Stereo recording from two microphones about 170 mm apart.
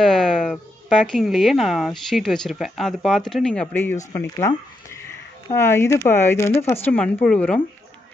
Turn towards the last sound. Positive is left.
turn(degrees=5)  # may be behind; listen again after turning